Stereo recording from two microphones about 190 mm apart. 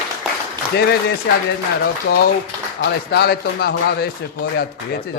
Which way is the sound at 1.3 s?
55° left (ahead or behind).